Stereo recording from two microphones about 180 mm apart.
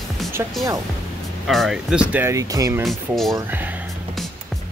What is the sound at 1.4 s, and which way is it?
Speech, centre (ahead or behind).